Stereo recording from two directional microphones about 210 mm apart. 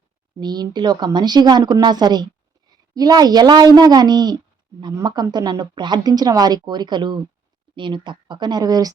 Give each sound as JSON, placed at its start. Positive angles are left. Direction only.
{"t": 0.3, "sound": "speech", "side_deg": -20}